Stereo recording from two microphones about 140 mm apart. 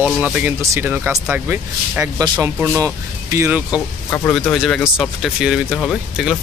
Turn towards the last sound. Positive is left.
turn(degrees=0)  # may be behind; listen again after turning